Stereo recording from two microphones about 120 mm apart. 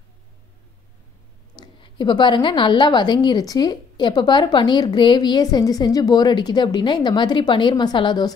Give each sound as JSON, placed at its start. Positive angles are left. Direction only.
{"t": 1.6, "sound": "a woman's voice", "side_deg": 40}